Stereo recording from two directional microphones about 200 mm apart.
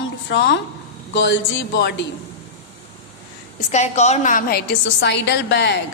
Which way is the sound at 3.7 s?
35° left (ahead or behind).